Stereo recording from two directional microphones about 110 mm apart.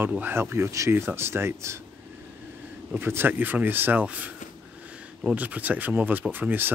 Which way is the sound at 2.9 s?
20° right (ahead or behind).